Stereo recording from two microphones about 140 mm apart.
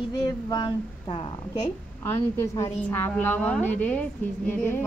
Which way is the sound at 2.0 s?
20° left (ahead or behind).